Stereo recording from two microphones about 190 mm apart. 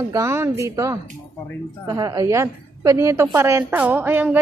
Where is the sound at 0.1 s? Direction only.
15° right (ahead or behind).